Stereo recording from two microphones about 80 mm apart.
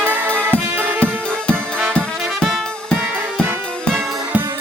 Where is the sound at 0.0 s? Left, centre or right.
Right.